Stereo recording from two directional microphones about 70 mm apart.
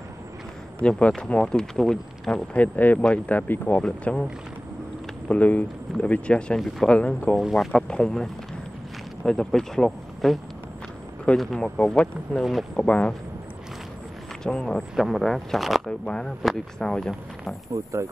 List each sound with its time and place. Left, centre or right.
0.8 s speech: centre
2.5 s speech: left
3.8 s speech: centre
5.3 s speech: left
7.3 s speech: centre
14.4 s speech: centre
14.8 s speech: centre
17.8 s speech: right